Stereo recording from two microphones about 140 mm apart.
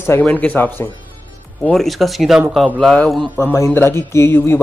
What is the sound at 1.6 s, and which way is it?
Speech, centre (ahead or behind).